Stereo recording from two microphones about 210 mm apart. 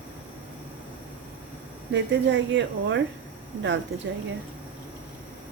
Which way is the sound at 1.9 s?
60° right (ahead or behind).